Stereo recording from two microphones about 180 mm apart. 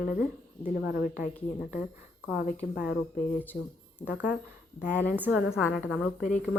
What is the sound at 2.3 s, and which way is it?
Speech, 55° left (ahead or behind).